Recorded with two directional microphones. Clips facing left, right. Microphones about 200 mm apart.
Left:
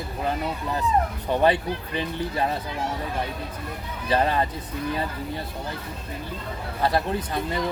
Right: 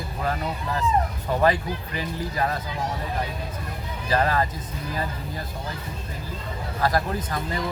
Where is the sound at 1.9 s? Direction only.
25° left (ahead or behind).